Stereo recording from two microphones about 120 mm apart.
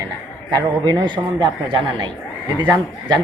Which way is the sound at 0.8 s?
40° right (ahead or behind).